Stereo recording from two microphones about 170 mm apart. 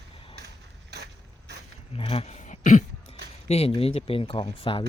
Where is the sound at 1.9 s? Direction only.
35° left (ahead or behind).